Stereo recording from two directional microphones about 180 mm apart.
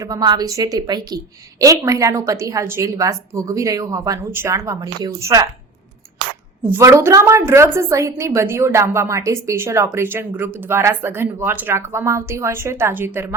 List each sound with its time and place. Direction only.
0.0 s a woman's voice: 20° right (ahead or behind)
6.7 s a woman's voice: 15° right (ahead or behind)